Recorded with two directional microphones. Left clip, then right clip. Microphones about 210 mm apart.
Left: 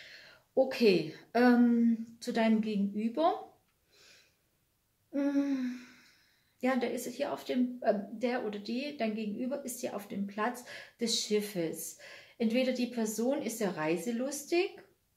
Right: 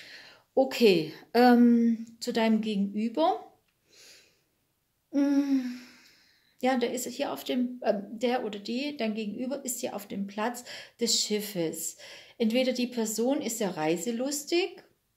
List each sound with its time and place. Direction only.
0.0 s a woman's voice: 50° right (ahead or behind)
5.1 s a sound: 40° right (ahead or behind)
6.6 s a woman's voice: 45° right (ahead or behind)